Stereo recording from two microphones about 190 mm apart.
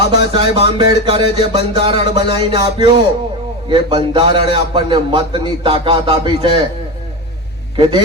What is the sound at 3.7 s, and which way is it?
A man's voice, 25° right (ahead or behind).